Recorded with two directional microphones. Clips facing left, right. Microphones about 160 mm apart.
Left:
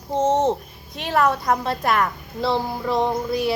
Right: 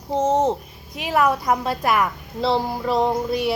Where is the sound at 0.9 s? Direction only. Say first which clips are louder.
Even; 5° right (ahead or behind).